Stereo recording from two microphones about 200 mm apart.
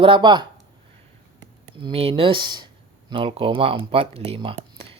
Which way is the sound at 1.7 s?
25° right (ahead or behind).